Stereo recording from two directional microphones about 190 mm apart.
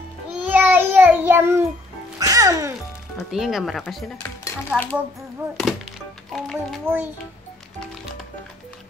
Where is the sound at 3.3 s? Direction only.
Centre (ahead or behind).